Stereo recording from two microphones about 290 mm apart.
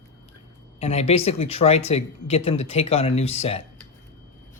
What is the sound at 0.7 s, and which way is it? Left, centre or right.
Speech, left.